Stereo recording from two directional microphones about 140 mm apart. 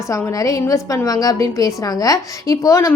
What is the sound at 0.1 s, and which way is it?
A woman's voice, 20° left (ahead or behind).